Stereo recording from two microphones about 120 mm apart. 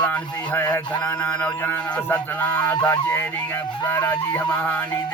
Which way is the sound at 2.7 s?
35° left (ahead or behind).